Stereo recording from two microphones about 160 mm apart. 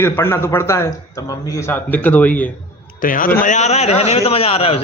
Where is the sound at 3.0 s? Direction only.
60° left (ahead or behind).